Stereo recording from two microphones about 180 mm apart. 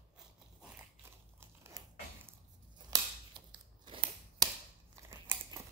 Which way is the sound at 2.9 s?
25° right (ahead or behind).